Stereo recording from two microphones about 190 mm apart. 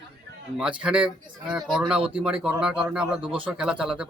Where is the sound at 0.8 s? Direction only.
5° right (ahead or behind).